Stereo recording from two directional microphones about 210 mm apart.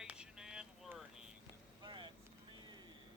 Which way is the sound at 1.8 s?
20° right (ahead or behind).